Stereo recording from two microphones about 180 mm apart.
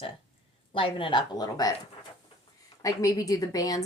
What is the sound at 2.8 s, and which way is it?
Speech, 20° left (ahead or behind).